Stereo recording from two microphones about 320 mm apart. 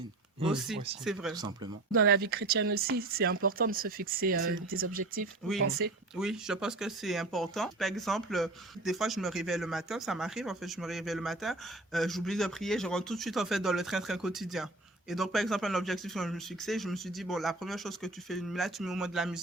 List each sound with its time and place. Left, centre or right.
0.4 s speech: centre
1.9 s speech: right
6.1 s speech: centre